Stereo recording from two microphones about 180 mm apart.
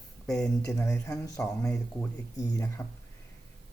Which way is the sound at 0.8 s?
15° left (ahead or behind).